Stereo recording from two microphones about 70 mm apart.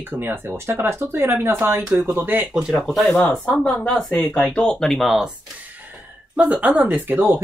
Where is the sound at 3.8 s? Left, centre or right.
Centre.